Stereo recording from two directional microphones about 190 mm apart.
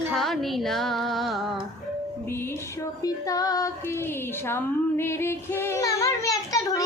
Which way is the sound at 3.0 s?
20° left (ahead or behind).